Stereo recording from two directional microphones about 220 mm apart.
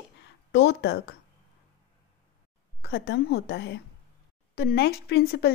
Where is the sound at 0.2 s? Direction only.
50° left (ahead or behind).